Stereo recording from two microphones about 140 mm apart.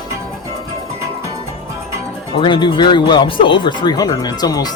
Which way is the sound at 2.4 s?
35° left (ahead or behind).